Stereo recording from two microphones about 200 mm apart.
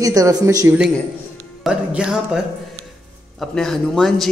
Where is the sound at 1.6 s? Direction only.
5° right (ahead or behind).